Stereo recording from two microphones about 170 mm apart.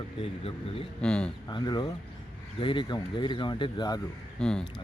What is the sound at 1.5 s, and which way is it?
Speech, 25° left (ahead or behind).